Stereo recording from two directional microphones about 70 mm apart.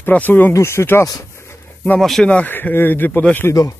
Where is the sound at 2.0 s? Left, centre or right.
Centre.